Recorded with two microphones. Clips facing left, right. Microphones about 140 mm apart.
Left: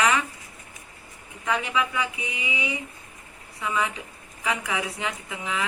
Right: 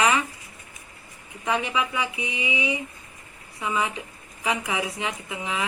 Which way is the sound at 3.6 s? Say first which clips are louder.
Right 1 dB; 20° right (ahead or behind).